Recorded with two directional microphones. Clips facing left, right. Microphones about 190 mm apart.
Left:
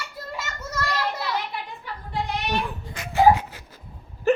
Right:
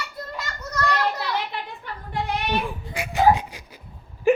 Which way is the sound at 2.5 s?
10° right (ahead or behind).